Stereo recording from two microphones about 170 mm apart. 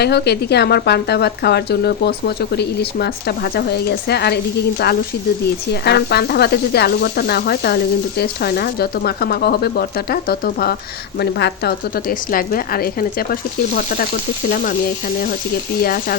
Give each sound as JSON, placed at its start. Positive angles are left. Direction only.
{"t": 0.0, "sound": "speech", "side_deg": 75}
{"t": 5.8, "sound": "speech", "side_deg": 75}
{"t": 11.2, "sound": "speech", "side_deg": 75}
{"t": 14.5, "sound": "speech", "side_deg": 55}
{"t": 15.8, "sound": "speech", "side_deg": 60}